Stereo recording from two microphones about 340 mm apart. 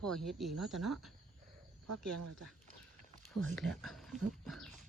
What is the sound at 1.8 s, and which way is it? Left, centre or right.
Speech, right.